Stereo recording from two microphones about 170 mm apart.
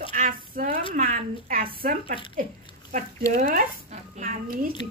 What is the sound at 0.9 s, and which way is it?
Speech, 55° right (ahead or behind).